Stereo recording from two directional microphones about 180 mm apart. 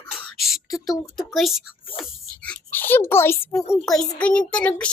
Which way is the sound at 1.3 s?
Centre (ahead or behind).